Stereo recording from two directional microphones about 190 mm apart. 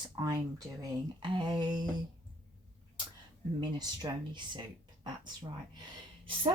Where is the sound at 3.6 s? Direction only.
20° right (ahead or behind).